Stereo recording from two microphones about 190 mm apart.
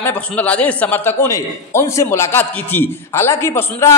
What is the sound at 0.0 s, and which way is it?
A man's voice, 10° left (ahead or behind).